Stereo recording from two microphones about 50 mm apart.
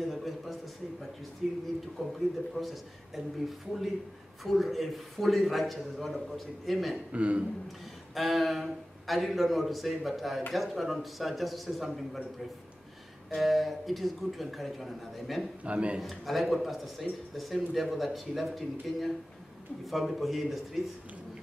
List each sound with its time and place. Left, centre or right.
0.1 s a sound: centre
1.4 s speech: centre
7.1 s a man's voice: right
7.6 s speech: centre
13.3 s speech: centre
15.6 s a man's voice: right
16.0 s speech: centre